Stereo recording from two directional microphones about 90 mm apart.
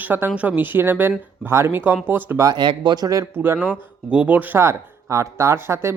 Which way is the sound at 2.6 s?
60° right (ahead or behind).